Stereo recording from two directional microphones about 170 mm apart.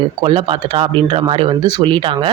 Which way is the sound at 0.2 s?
30° right (ahead or behind).